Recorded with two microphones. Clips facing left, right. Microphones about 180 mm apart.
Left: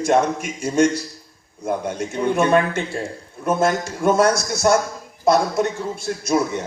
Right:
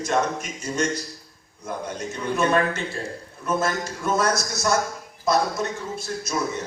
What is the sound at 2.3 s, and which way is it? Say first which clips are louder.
A man's voice: left 3 dB; 55° left (ahead or behind).